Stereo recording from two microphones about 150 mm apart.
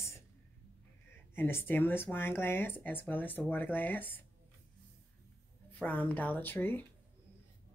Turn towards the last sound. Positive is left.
turn(degrees=15)  # may be behind; listen again after turning